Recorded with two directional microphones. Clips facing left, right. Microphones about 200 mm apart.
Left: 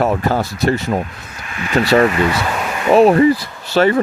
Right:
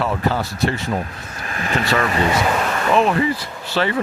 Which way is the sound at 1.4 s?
40° right (ahead or behind).